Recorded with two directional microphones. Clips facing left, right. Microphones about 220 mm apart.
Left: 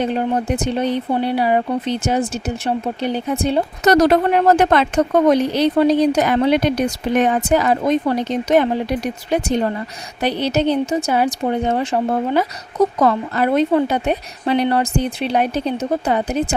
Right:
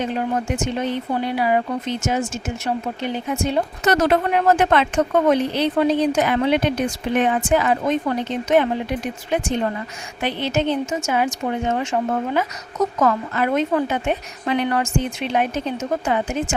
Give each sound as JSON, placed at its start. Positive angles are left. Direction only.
{"t": 0.0, "sound": "speech", "side_deg": 35}